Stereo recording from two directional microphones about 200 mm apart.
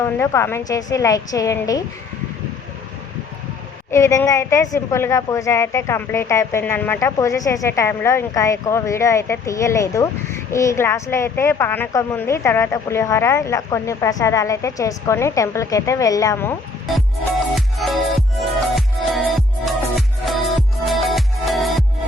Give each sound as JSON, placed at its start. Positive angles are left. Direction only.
{"t": 0.0, "sound": "a woman's voice", "side_deg": 10}
{"t": 3.9, "sound": "a woman's voice", "side_deg": 15}
{"t": 17.7, "sound": "music", "side_deg": 0}